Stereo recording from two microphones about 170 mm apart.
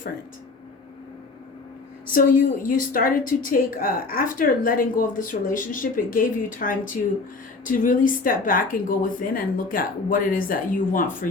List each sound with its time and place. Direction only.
2.1 s a woman's voice: 55° left (ahead or behind)